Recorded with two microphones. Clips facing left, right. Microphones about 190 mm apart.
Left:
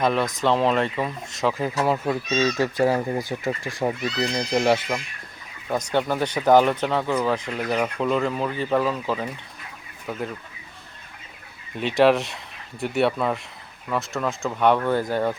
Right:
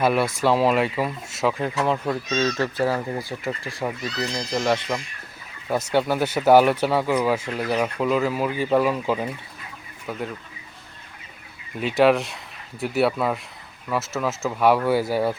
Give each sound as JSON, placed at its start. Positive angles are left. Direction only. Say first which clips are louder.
{"t": 0.0, "sound": "speech", "louder": "right 1 dB", "side_deg": -10}
{"t": 5.6, "sound": "speech", "louder": "right 2 dB", "side_deg": -5}
{"t": 10.1, "sound": "speech", "louder": "even", "side_deg": 0}
{"t": 11.8, "sound": "speech", "louder": "even", "side_deg": 0}